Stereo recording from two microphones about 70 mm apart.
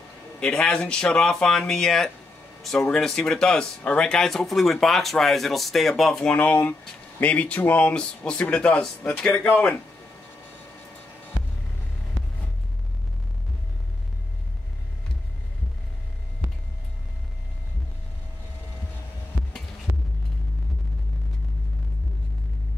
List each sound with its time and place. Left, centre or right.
0.4 s speech: centre
6.3 s speech: left